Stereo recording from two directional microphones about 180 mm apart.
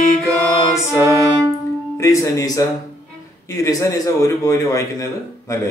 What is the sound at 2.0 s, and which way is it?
A man's voice, 15° left (ahead or behind).